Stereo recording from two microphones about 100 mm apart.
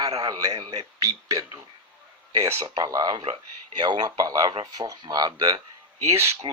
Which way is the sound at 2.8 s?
40° right (ahead or behind).